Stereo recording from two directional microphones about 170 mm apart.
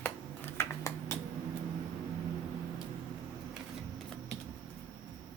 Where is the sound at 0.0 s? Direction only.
10° left (ahead or behind).